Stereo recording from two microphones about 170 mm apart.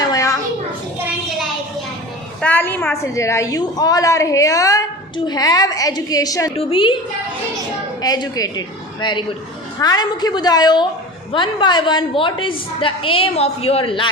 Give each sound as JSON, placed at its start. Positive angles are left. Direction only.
{"t": 0.0, "sound": "a sound", "side_deg": 20}
{"t": 2.4, "sound": "a woman's voice", "side_deg": 10}
{"t": 6.6, "sound": "a woman's voice", "side_deg": 30}
{"t": 8.0, "sound": "a woman's voice", "side_deg": 20}